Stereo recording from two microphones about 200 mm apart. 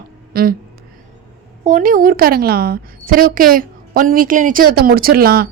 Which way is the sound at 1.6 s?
40° right (ahead or behind).